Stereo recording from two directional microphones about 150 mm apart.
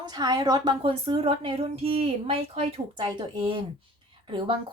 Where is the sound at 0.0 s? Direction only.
25° right (ahead or behind).